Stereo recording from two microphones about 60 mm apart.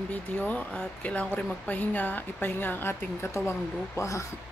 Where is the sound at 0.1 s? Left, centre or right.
Left.